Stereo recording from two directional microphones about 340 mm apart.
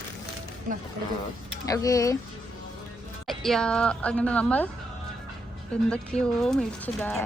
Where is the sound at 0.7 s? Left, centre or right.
Right.